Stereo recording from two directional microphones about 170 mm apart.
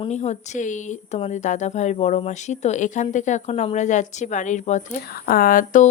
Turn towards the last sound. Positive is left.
turn(degrees=50)  # may be behind; listen again after turning